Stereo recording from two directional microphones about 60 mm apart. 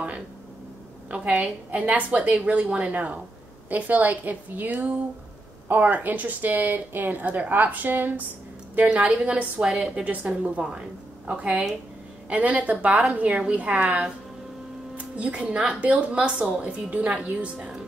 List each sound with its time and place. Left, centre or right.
1.1 s speech: centre